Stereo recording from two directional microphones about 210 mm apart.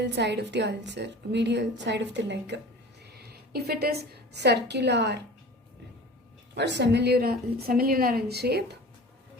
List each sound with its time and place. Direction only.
0.0 s a woman's voice: 55° right (ahead or behind)
6.5 s a woman's voice: 55° right (ahead or behind)